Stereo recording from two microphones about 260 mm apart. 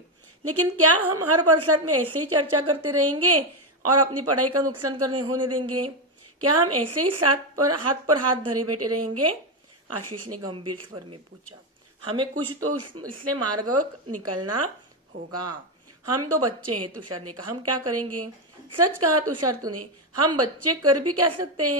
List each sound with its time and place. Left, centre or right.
0.4 s a woman's voice: right
12.4 s a woman's voice: right
16.1 s a woman's voice: right